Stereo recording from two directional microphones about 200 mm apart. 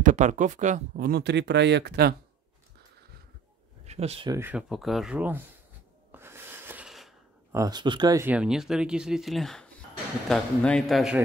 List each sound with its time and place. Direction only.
0.0 s speech: 35° right (ahead or behind); by 2.1 s 55° right (ahead or behind)
3.8 s speech: 30° right (ahead or behind)
4.3 s speech: 10° right (ahead or behind)
6.1 s a sound: 10° right (ahead or behind)
7.5 s speech: 20° right (ahead or behind); by 11.1 s centre (ahead or behind)